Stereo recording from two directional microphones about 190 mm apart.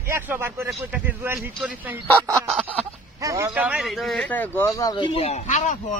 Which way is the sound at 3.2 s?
15° right (ahead or behind).